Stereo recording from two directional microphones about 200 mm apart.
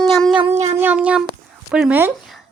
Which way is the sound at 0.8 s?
5° right (ahead or behind).